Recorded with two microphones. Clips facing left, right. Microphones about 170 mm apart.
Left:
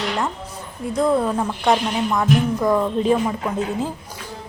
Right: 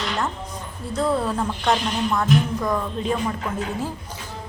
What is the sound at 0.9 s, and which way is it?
A woman's voice, 10° left (ahead or behind).